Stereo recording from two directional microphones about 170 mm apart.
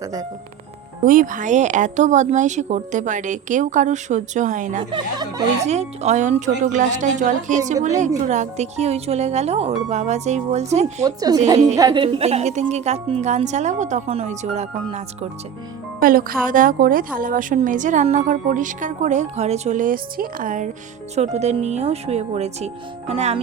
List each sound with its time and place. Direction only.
0.0 s speech: 20° right (ahead or behind)
1.0 s speech: 50° right (ahead or behind)
4.8 s speech: 25° right (ahead or behind)
5.6 s a woman's voice: 40° right (ahead or behind)
11.0 s a woman's voice: 20° right (ahead or behind); by 15.3 s 40° right (ahead or behind)
16.0 s speech: 55° right (ahead or behind)
21.2 s a woman's voice: 40° right (ahead or behind)